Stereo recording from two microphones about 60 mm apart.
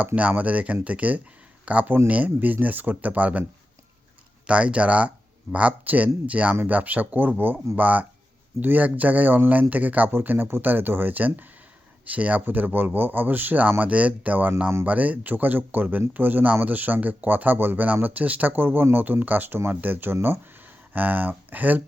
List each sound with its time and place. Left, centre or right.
0.2 s speech: right
4.4 s speech: centre
10.1 s speech: right